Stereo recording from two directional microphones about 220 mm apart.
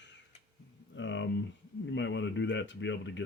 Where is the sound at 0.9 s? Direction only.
55° left (ahead or behind).